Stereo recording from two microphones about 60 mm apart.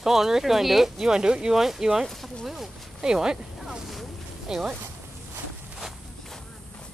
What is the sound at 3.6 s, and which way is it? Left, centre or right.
Boat, centre.